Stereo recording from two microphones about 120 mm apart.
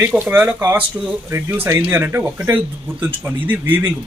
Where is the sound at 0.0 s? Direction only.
15° right (ahead or behind).